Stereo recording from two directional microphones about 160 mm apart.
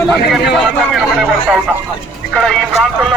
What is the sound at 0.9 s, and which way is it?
Speech, centre (ahead or behind).